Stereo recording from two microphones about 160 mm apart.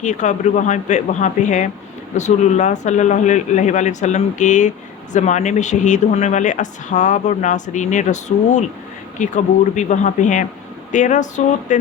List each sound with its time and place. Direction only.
0.0 s speech: 50° left (ahead or behind)